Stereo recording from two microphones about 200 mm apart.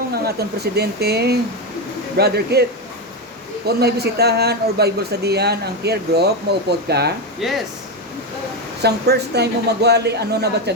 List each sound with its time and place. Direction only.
0.3 s speech: 55° right (ahead or behind)
3.7 s speech: 55° right (ahead or behind)
7.4 s speech: centre (ahead or behind)
8.8 s speech: 55° right (ahead or behind)